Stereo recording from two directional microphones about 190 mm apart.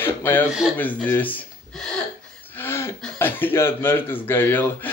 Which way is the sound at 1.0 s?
10° left (ahead or behind).